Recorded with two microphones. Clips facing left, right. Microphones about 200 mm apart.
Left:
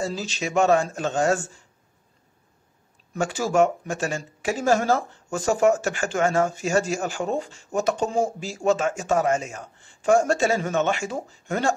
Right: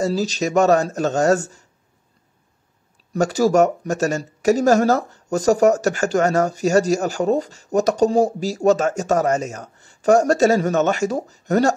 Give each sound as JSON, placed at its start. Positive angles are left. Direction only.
{"t": 0.0, "sound": "speech", "side_deg": -40}
{"t": 3.1, "sound": "speech", "side_deg": -40}